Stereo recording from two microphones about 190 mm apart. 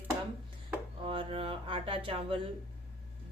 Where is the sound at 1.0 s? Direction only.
25° right (ahead or behind).